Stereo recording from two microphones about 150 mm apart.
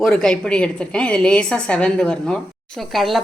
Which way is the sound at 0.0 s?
5° left (ahead or behind).